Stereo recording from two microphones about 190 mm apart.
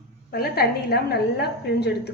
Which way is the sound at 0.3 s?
55° left (ahead or behind).